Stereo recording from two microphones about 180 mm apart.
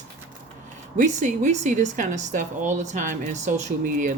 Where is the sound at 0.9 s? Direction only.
45° right (ahead or behind).